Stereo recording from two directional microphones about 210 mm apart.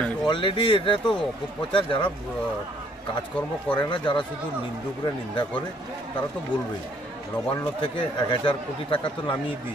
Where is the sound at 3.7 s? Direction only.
20° left (ahead or behind).